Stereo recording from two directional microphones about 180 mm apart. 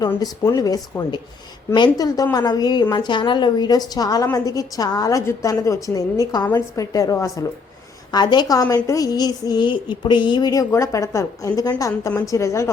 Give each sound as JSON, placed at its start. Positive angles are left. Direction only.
{"t": 0.0, "sound": "a woman's voice", "side_deg": 20}